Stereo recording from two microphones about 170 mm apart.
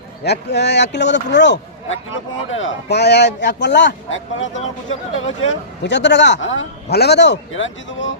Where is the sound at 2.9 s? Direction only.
80° left.